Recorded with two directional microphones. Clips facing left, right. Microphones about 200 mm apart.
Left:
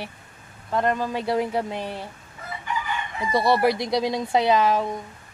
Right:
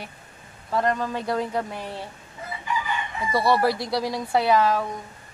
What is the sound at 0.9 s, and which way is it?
Speech, 15° left (ahead or behind).